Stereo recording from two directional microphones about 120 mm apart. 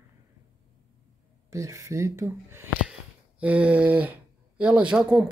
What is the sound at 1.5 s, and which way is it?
Speech, 25° right (ahead or behind).